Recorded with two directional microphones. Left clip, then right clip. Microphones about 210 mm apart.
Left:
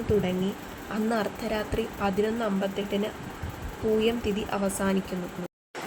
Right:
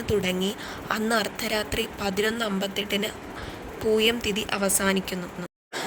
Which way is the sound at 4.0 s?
50° right (ahead or behind).